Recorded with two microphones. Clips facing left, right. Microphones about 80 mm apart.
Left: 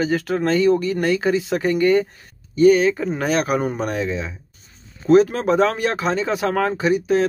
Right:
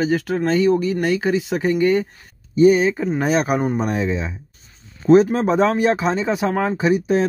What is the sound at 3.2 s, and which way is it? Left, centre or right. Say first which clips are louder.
Speech: right 4 dB; right.